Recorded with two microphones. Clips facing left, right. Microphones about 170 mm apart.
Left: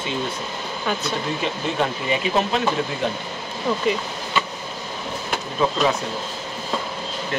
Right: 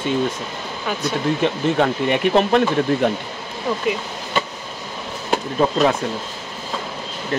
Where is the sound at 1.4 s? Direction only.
60° right (ahead or behind).